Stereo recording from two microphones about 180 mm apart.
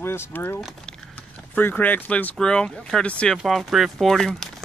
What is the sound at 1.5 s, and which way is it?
Speech, 10° left (ahead or behind).